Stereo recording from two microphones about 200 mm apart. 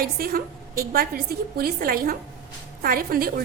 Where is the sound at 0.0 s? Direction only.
45° right (ahead or behind).